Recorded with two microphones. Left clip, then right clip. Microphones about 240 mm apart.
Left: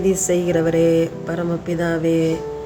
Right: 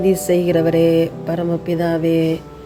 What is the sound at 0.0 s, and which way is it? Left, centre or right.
Speech, centre.